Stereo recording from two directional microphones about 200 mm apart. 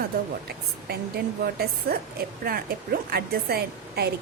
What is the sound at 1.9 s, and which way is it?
A woman's voice, 50° right (ahead or behind).